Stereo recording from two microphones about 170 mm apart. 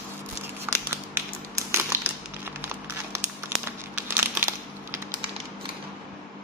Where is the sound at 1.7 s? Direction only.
15° right (ahead or behind).